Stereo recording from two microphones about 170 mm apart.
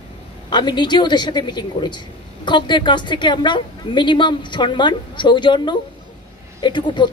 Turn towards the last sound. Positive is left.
turn(degrees=25)  # may be behind; listen again after turning